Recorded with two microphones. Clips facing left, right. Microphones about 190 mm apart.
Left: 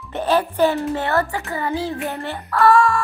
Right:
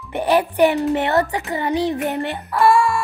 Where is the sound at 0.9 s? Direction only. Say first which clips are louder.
Right 3 dB; 20° right (ahead or behind).